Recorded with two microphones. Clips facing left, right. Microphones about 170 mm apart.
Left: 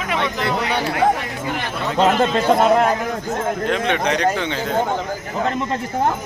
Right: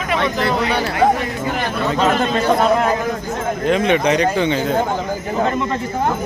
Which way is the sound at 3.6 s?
5° right (ahead or behind).